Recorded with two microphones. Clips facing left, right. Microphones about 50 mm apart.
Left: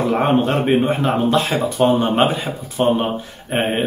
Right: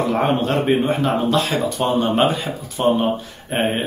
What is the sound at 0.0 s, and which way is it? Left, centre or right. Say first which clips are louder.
A man's voice: left 2 dB; centre.